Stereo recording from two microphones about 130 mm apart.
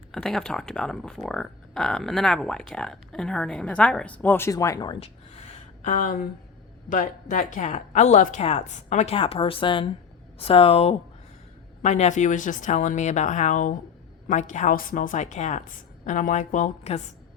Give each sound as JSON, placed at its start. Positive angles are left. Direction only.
{"t": 0.1, "sound": "speech", "side_deg": 5}
{"t": 4.5, "sound": "speech", "side_deg": 25}
{"t": 4.9, "sound": "a sound", "side_deg": 50}
{"t": 6.9, "sound": "a woman's voice", "side_deg": 90}
{"t": 9.1, "sound": "speech", "side_deg": 45}
{"t": 11.8, "sound": "a woman's voice", "side_deg": 65}
{"t": 14.3, "sound": "a woman's voice", "side_deg": 70}